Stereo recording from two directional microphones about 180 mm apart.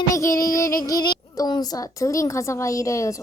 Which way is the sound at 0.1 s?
15° left (ahead or behind).